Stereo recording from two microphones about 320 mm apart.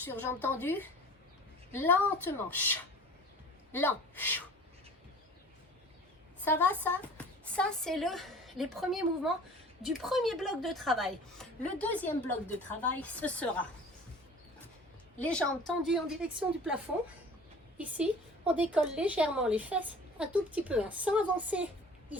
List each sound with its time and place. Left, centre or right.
0.0 s a woman's voice: centre
6.4 s a woman's voice: centre
15.2 s a woman's voice: centre